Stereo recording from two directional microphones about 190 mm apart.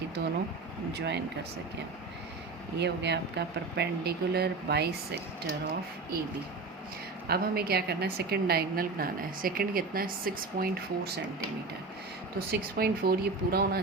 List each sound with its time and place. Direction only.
0.9 s speech: 65° right (ahead or behind)
2.7 s speech: 65° right (ahead or behind)
7.3 s a woman's voice: 55° right (ahead or behind)
12.5 s a woman's voice: 55° right (ahead or behind)